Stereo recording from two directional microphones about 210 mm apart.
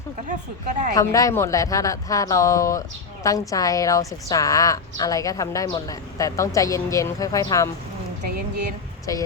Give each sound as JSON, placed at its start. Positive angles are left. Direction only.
{"t": 0.3, "sound": "speech", "side_deg": -35}
{"t": 0.9, "sound": "a woman's voice", "side_deg": 15}
{"t": 9.1, "sound": "a woman's voice", "side_deg": 15}